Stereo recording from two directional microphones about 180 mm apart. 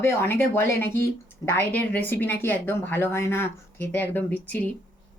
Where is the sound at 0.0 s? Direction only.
15° left (ahead or behind).